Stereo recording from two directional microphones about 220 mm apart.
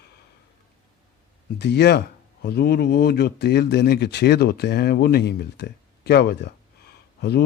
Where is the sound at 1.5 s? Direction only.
50° left (ahead or behind).